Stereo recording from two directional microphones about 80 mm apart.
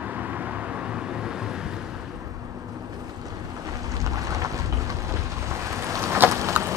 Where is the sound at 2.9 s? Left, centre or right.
Right.